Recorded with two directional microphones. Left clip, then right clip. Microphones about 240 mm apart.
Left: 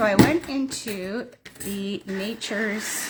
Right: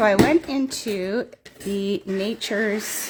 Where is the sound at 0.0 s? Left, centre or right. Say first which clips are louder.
Right 2 dB; right.